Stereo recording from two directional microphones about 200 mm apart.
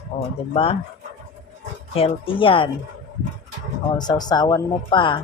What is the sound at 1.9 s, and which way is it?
Speech, 25° left (ahead or behind).